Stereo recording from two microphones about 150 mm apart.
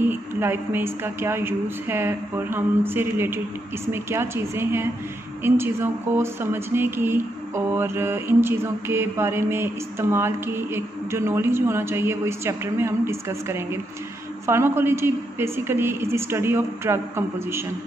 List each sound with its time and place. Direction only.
0.0 s speech: 15° right (ahead or behind)